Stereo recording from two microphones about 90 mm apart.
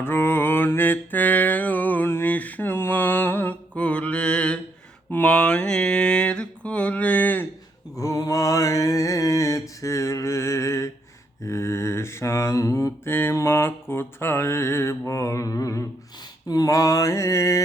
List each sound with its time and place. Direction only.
0.0 s mantra: 25° left (ahead or behind)
7.9 s mantra: 40° left (ahead or behind)